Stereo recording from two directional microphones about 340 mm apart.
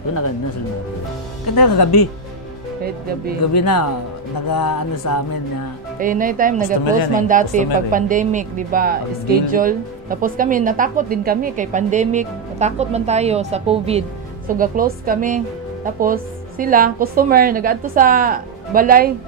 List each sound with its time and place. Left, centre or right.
1.5 s speech: left
3.5 s speech: left
5.9 s a woman's voice: right